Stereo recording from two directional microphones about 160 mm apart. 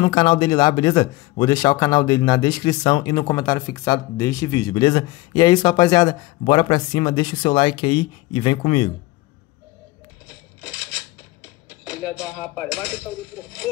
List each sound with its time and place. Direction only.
0.0 s speech: 30° left (ahead or behind)
10.2 s a sound: 5° right (ahead or behind)
11.7 s music: 5° right (ahead or behind)
12.4 s speech: 10° left (ahead or behind)